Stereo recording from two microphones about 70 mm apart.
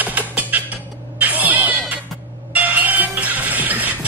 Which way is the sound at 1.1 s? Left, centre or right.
Right.